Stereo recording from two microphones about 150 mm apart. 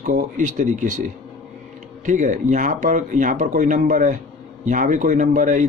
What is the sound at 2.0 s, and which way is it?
A man's voice, 55° right (ahead or behind).